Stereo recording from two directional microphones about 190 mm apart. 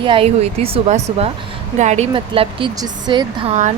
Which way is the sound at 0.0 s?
30° right (ahead or behind).